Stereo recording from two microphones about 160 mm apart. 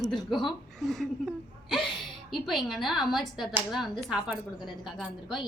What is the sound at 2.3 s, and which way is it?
A woman's voice, centre (ahead or behind).